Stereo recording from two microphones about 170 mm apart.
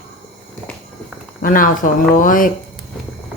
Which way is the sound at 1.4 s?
55° left (ahead or behind).